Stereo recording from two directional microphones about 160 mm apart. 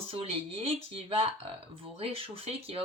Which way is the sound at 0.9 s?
35° right (ahead or behind).